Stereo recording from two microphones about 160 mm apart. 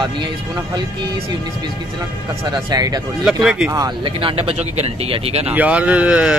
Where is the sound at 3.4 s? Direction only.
5° right (ahead or behind).